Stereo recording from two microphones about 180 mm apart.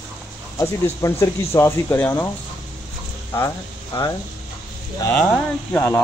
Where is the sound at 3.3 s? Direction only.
20° left (ahead or behind).